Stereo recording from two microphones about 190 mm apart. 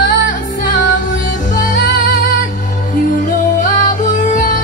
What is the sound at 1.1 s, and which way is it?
Music, 45° left (ahead or behind).